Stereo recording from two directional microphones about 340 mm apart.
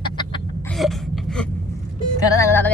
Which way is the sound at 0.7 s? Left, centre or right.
Centre.